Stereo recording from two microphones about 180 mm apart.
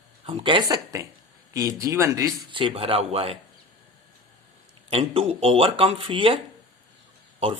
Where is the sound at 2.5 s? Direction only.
30° right (ahead or behind).